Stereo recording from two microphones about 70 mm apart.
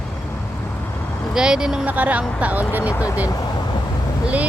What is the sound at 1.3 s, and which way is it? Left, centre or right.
Speech, centre.